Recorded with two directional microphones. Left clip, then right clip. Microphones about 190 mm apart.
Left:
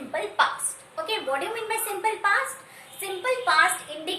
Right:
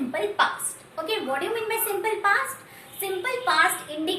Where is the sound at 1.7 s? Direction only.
15° left (ahead or behind).